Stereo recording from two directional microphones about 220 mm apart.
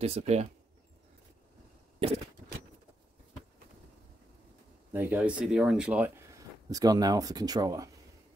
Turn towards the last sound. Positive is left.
turn(degrees=-15)  # may be behind; listen again after turning